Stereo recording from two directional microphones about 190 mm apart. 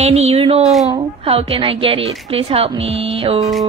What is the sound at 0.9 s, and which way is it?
A woman's voice, 30° right (ahead or behind).